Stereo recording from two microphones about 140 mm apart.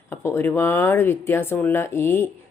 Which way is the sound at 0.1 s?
20° left (ahead or behind).